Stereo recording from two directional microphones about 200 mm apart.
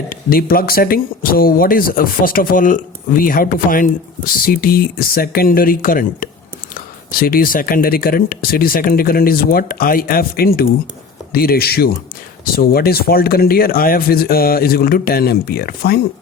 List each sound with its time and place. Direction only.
0.1 s speech: 45° left (ahead or behind)